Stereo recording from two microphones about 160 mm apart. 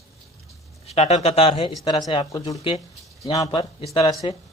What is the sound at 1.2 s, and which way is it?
Speech, 40° left (ahead or behind).